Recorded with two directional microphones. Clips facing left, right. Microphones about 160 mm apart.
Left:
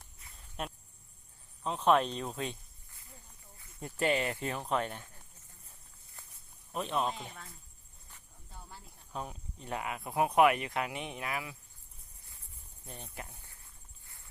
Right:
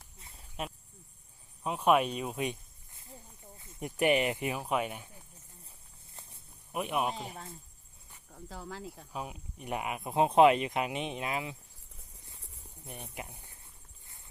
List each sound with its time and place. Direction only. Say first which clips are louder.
0.6 s speech: right 1 dB; 5° right (ahead or behind)
6.2 s snake: right 3 dB; 25° right (ahead or behind)
6.7 s speech: right 1 dB; 10° right (ahead or behind)
7.1 s speech: right 3 dB; 30° right (ahead or behind)
8.3 s speech: right 10 dB; 85° right
9.1 s speech: left 1 dB; 10° right (ahead or behind)
12.8 s speech: right 2 dB; 15° right (ahead or behind)